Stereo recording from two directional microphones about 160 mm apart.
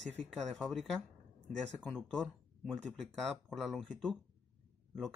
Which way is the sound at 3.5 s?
Centre (ahead or behind).